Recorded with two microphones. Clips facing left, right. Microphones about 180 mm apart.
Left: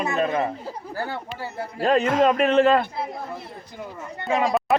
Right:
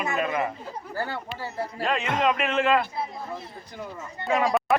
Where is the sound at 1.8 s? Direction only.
40° left (ahead or behind).